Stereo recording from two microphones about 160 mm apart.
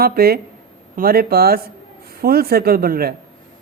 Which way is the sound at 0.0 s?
70° right (ahead or behind).